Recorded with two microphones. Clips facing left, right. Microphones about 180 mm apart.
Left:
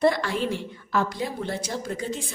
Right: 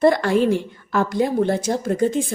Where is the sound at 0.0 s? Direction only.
50° right (ahead or behind).